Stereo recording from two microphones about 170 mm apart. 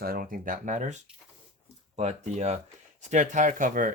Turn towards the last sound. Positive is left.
turn(degrees=-50)  # may be behind; listen again after turning